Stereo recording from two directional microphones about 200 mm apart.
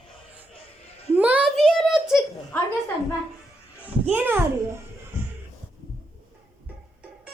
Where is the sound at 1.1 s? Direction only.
5° right (ahead or behind).